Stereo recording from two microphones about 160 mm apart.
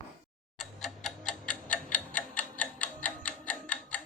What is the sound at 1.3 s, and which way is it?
Tick-tock, 55° left (ahead or behind).